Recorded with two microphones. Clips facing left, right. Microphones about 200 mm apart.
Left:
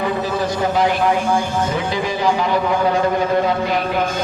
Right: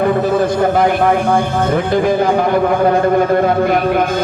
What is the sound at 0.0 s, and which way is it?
A man's voice, 55° right (ahead or behind).